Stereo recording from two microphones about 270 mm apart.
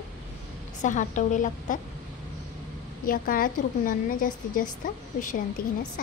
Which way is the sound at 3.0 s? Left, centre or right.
Left.